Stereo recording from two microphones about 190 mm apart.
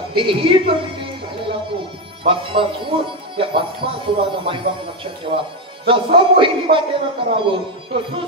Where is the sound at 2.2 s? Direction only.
25° right (ahead or behind).